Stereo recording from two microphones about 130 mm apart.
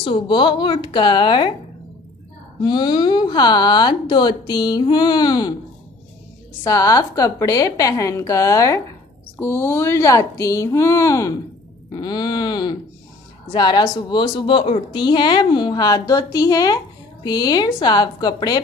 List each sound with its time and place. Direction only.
0.0 s a woman's voice: 40° left (ahead or behind)
2.6 s a woman's voice: 35° left (ahead or behind)
6.6 s a woman's voice: 25° left (ahead or behind)